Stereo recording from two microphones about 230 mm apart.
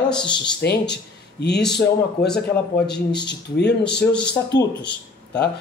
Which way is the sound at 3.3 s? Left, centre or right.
Left.